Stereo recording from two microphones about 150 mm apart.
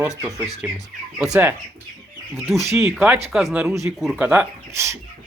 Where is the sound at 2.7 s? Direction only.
20° right (ahead or behind); by 4.3 s centre (ahead or behind).